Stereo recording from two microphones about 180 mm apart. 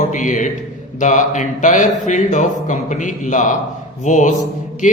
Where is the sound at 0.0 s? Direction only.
45° left (ahead or behind).